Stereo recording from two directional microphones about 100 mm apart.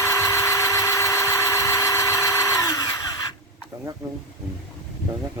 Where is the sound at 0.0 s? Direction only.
30° left (ahead or behind).